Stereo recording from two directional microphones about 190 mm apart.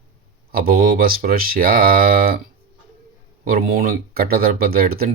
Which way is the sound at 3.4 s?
50° right (ahead or behind).